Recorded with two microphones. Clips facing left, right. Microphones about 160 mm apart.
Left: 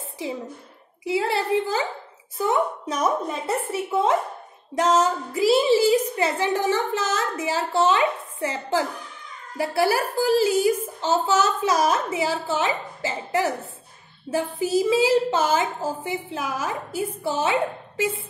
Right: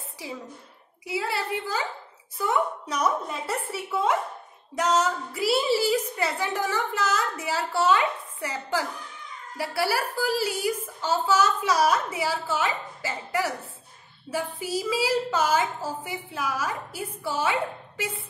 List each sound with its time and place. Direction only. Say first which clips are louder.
1.0 s a child's voice: left 6 dB; 25° left (ahead or behind)